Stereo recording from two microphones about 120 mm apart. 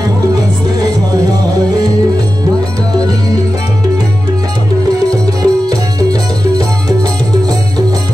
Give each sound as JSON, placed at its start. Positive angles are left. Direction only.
{"t": 5.1, "sound": "music", "side_deg": -30}